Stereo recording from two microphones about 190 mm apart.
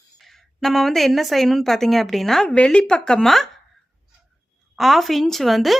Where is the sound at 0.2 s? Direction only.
Centre (ahead or behind).